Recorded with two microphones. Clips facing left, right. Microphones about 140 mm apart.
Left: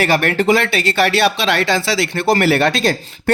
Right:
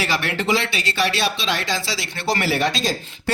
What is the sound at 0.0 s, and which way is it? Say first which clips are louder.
Speech: left 8 dB; 50° left (ahead or behind).